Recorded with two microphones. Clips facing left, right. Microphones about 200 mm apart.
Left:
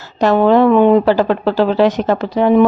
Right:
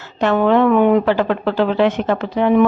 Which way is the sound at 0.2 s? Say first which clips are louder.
Left 3 dB; 35° left (ahead or behind).